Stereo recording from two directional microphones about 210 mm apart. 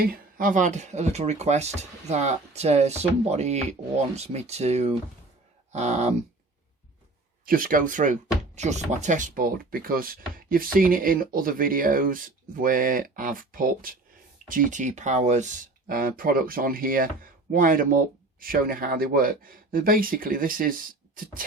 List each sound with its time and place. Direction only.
0.0 s speech: 45° right (ahead or behind)
7.4 s speech: 40° right (ahead or behind)